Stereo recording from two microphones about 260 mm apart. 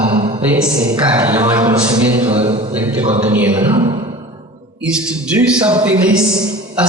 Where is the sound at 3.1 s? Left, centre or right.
Right.